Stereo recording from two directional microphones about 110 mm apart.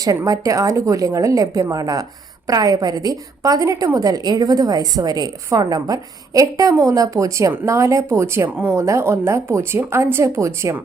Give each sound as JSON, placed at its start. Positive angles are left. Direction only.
{"t": 0.0, "sound": "a woman's voice", "side_deg": -30}